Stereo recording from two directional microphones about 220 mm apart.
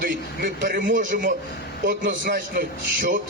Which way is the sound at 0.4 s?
45° right (ahead or behind).